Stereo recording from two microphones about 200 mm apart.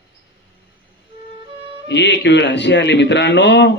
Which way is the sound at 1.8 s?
60° left (ahead or behind).